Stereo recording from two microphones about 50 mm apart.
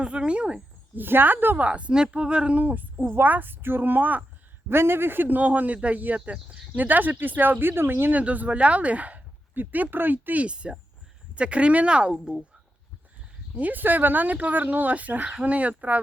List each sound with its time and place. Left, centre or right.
0.0 s speech: right
0.9 s a woman's voice: right
1.6 s a woman's voice: right
4.7 s a woman's voice: right
8.1 s a woman's voice: right
10.4 s speech: right
13.6 s a woman's voice: right